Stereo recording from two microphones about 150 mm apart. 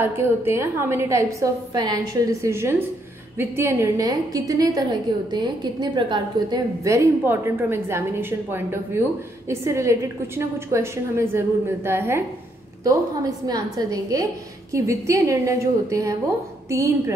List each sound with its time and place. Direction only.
0.0 s a woman's voice: 15° right (ahead or behind)
12.8 s a woman's voice: 25° right (ahead or behind)